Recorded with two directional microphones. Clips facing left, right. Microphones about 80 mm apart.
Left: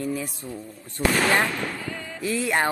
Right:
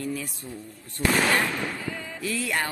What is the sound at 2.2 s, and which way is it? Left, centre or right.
Speech, left.